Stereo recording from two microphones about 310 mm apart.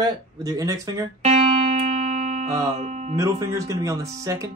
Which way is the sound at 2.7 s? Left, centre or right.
Right.